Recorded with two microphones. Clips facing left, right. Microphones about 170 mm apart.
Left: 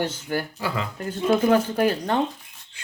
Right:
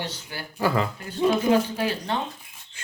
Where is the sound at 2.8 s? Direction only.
45° right (ahead or behind).